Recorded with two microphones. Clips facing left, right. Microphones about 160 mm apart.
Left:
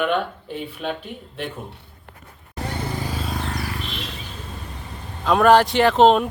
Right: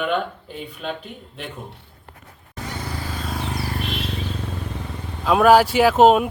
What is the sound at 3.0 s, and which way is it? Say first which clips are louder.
Vehicle: left 2 dB; 5° left (ahead or behind).